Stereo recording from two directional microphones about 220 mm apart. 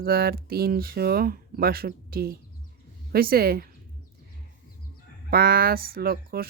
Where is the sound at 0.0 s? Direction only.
45° right (ahead or behind).